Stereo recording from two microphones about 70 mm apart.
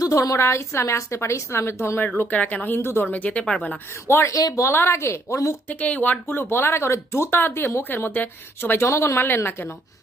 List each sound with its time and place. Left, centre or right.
0.0 s a woman's voice: left
2.3 s a woman's voice: centre
3.1 s speech: left
4.0 s speech: left
4.4 s speech: left
4.6 s speech: left
5.6 s speech: left
8.9 s speech: left